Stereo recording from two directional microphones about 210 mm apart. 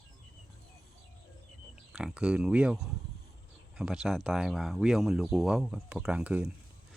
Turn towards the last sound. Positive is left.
turn(degrees=-5)  # may be behind; listen again after turning